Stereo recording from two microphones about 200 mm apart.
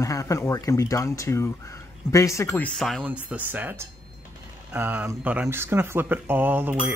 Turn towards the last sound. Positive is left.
turn(degrees=-10)  # may be behind; listen again after turning